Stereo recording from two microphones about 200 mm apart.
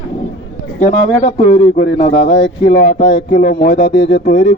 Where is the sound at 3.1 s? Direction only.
35° left (ahead or behind).